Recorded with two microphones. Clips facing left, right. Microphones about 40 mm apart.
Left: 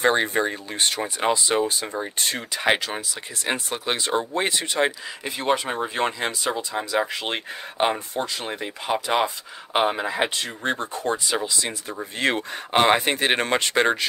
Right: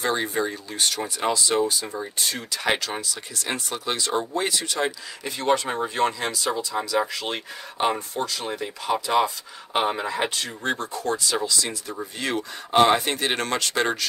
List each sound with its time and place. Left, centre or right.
0.0 s speech: left
2.5 s speech: left
7.9 s speech: centre
8.4 s speech: left
12.2 s speech: left